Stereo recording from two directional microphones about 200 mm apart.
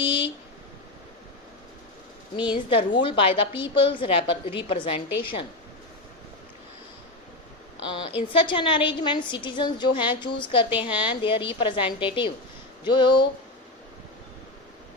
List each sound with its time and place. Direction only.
0.0 s a sound: 25° left (ahead or behind)
2.3 s a woman's voice: 25° left (ahead or behind)
7.9 s a woman's voice: 25° left (ahead or behind)
10.7 s a woman's voice: 5° right (ahead or behind)
11.1 s a woman's voice: 25° left (ahead or behind)